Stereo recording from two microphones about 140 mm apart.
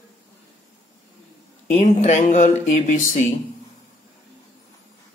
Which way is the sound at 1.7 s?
55° left (ahead or behind).